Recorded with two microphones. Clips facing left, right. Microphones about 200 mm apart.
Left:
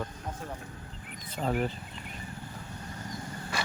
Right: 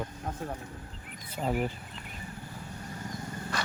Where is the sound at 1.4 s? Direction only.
10° right (ahead or behind).